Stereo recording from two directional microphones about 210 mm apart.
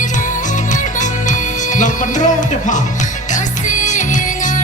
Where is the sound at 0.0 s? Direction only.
35° left (ahead or behind).